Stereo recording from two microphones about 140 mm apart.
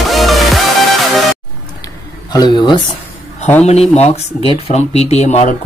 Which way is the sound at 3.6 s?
50° left (ahead or behind).